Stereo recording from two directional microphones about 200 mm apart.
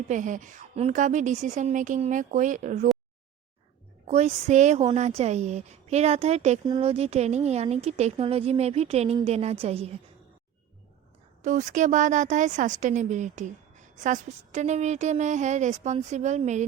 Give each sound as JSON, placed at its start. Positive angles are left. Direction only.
{"t": 0.1, "sound": "a woman's voice", "side_deg": -40}
{"t": 4.0, "sound": "a woman's voice", "side_deg": -35}
{"t": 11.4, "sound": "a woman's voice", "side_deg": -40}